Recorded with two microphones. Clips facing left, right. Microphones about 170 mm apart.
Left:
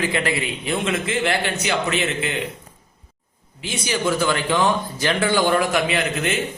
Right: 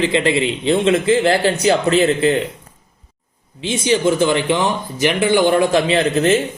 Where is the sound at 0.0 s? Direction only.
25° right (ahead or behind).